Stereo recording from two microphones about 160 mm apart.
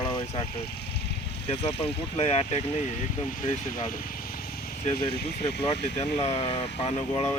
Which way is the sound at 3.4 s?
55° left (ahead or behind).